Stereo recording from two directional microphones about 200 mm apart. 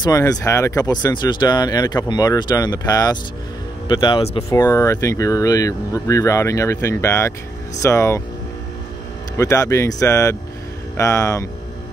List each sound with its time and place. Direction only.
0.0 s speech: 15° left (ahead or behind)
4.5 s speech: 15° left (ahead or behind)
9.4 s speech: 15° left (ahead or behind)